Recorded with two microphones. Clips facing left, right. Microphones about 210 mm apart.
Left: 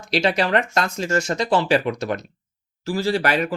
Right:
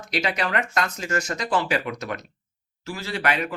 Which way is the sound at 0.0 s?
30° left (ahead or behind).